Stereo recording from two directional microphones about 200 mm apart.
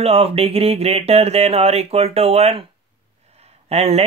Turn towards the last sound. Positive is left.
turn(degrees=-30)  # may be behind; listen again after turning